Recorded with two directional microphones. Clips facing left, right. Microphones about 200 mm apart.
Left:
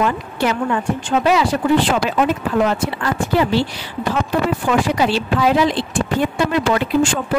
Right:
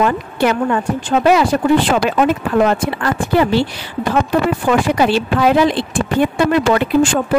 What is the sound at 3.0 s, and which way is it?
Speech, 55° right (ahead or behind).